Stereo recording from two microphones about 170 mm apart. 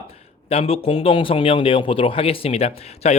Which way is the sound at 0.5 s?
35° left (ahead or behind).